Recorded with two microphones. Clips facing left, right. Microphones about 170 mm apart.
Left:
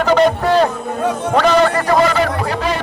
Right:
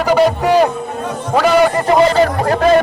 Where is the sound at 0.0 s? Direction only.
10° right (ahead or behind).